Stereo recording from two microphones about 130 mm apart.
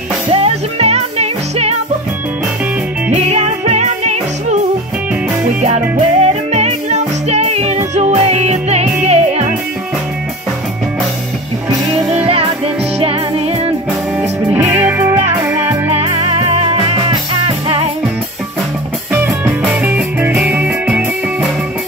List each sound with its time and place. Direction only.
0.3 s music: 50° right (ahead or behind)
3.3 s music: 60° right (ahead or behind)
5.6 s music: 55° right (ahead or behind)
12.3 s music: 45° right (ahead or behind)
14.5 s music: 20° right (ahead or behind)
15.9 s music: 55° right (ahead or behind)
19.2 s music: 5° right (ahead or behind)